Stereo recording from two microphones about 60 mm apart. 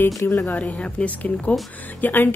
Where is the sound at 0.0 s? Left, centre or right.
Left.